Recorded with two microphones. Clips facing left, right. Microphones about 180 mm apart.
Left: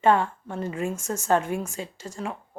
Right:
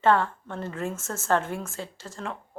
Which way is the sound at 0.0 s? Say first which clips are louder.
Left 1 dB; 15° left (ahead or behind).